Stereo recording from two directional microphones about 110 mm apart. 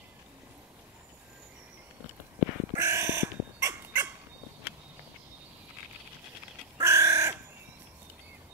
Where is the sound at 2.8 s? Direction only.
25° right (ahead or behind).